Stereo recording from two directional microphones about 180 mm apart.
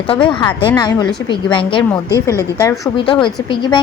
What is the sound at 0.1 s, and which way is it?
A woman's voice, 30° left (ahead or behind).